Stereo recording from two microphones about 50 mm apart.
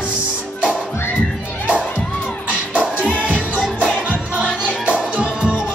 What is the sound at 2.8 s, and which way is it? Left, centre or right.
Music, right.